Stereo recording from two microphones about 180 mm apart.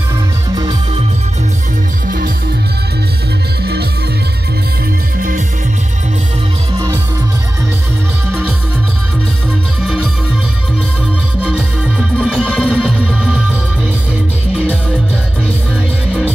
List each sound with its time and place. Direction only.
0.6 s music: 25° right (ahead or behind)
2.0 s music: 55° right (ahead or behind)
8.3 s music: 10° right (ahead or behind)
12.2 s music: centre (ahead or behind)